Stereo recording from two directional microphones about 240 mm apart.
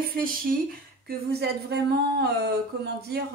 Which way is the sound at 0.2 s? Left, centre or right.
Right.